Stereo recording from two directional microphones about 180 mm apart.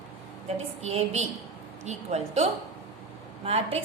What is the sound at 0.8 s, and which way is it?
A woman's voice, 35° right (ahead or behind).